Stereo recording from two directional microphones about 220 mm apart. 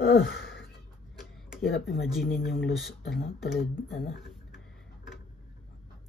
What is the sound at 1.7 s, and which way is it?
Speech, centre (ahead or behind).